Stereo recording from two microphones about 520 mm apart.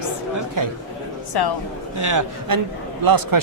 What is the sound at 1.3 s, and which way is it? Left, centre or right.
Speech, left.